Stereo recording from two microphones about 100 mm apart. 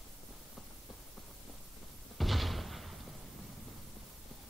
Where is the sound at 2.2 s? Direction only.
Centre (ahead or behind).